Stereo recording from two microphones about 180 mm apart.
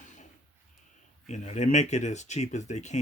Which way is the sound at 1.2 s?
40° left (ahead or behind).